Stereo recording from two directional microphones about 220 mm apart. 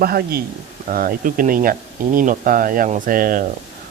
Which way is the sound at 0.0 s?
45° right (ahead or behind).